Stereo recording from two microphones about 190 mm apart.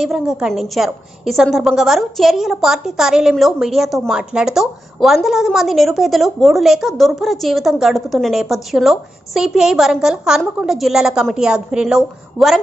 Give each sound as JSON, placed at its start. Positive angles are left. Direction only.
{"t": 0.0, "sound": "a woman's voice", "side_deg": 0}